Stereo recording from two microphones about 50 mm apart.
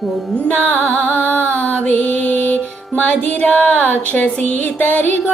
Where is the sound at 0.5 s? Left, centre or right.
Left.